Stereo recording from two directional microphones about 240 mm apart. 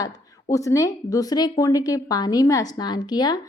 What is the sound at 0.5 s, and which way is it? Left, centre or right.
A woman's voice, centre.